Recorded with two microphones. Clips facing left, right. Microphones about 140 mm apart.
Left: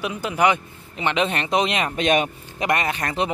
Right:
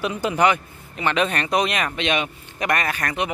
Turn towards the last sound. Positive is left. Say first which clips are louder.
# left 1 dB
turn(degrees=25)  # may be behind; listen again after turning